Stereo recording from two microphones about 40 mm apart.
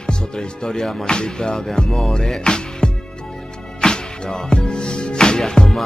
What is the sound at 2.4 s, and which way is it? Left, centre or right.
Music, centre.